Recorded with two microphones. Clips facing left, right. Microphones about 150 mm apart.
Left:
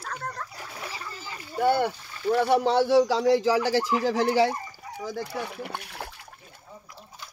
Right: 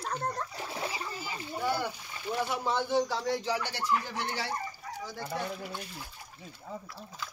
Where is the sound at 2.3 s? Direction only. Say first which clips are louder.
Left 10 dB; 65° left (ahead or behind); by 4.5 s 90° left.